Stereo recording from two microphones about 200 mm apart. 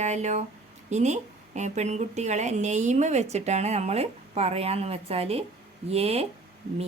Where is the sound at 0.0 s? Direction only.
35° right (ahead or behind).